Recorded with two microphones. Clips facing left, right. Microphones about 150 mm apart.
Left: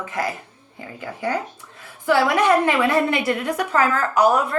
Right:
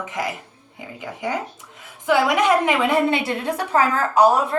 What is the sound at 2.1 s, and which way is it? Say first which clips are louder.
A woman's voice: even; 15° right (ahead or behind).